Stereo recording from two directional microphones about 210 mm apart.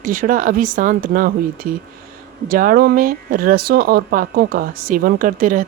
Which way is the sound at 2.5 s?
40° right (ahead or behind).